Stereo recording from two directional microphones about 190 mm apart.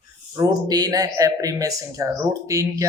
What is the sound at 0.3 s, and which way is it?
Speech, 20° right (ahead or behind).